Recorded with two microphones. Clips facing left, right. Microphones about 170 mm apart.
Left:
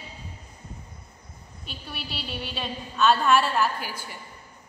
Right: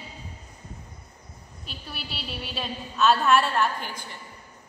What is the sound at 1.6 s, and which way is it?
A woman's voice, centre (ahead or behind).